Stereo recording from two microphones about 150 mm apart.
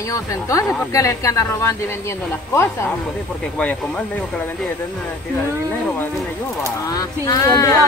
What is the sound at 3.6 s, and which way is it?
Speech, 10° left (ahead or behind).